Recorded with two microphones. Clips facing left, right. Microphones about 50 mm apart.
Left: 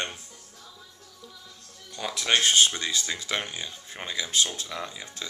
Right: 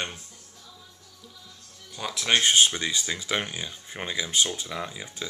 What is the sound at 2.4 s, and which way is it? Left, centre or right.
Speech, right.